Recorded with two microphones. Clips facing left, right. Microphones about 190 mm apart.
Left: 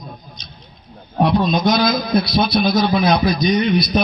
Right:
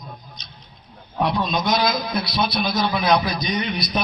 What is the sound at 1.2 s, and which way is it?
A man's voice, 45° left (ahead or behind).